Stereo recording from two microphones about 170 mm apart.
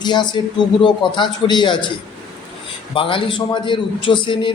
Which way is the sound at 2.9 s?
30° left (ahead or behind).